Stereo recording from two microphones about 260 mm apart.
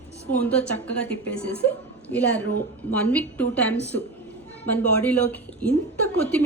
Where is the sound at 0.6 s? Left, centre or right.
Left.